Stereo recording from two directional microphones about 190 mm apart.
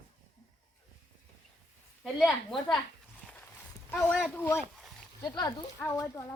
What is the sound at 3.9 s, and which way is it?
Speech, 5° left (ahead or behind).